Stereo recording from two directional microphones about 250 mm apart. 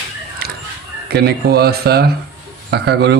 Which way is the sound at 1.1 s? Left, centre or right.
Right.